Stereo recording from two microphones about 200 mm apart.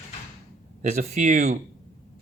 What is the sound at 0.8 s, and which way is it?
Speech, 40° right (ahead or behind).